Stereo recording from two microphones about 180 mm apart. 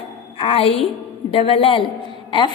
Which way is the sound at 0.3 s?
30° left (ahead or behind).